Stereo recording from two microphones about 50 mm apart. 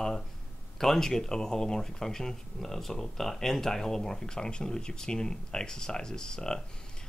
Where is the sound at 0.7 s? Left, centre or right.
Centre.